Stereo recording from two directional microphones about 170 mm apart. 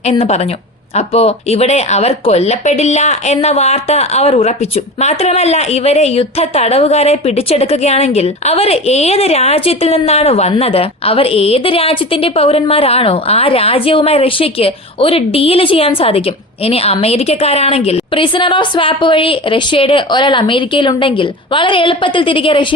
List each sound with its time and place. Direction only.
0.0 s a woman's voice: 35° left (ahead or behind)